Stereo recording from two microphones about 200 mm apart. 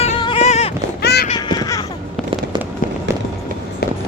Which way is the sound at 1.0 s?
55° left (ahead or behind).